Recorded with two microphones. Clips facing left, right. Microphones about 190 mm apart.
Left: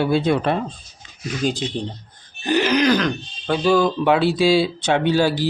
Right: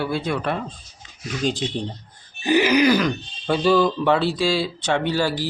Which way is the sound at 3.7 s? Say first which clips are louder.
Left 2 dB; 10° left (ahead or behind).